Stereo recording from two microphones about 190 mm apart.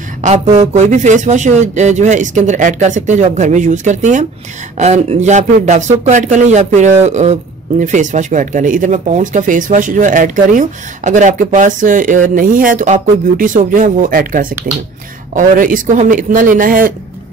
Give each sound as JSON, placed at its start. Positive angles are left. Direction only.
{"t": 0.2, "sound": "speech", "side_deg": -35}